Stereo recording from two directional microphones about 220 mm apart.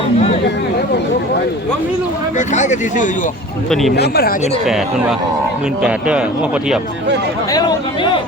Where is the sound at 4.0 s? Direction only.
50° left (ahead or behind).